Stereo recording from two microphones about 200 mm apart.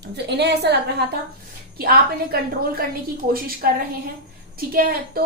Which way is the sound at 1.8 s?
50° right (ahead or behind).